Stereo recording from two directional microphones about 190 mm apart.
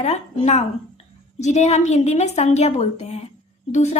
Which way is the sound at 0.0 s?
35° left (ahead or behind).